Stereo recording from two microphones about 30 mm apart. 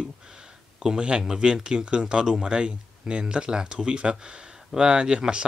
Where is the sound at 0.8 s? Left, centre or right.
Right.